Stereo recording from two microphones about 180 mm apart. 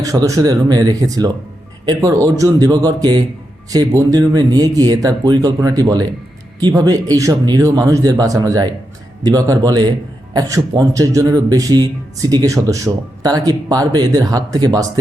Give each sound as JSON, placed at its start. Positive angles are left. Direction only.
{"t": 0.0, "sound": "speech", "side_deg": -20}